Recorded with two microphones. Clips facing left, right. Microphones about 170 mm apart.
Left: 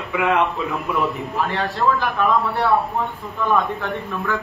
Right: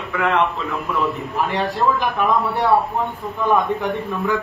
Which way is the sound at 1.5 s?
15° right (ahead or behind).